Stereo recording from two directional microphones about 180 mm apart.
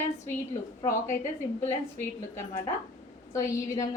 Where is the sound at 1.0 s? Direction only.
45° left (ahead or behind).